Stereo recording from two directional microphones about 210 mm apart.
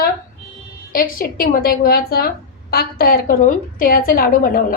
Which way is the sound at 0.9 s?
40° left (ahead or behind).